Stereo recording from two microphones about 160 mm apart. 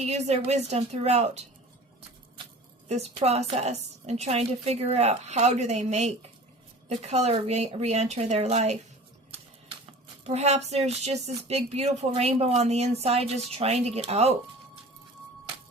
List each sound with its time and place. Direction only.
0.0 s a woman's voice: 45° right (ahead or behind)
2.9 s a woman's voice: 40° right (ahead or behind)
10.2 s a woman's voice: 45° right (ahead or behind)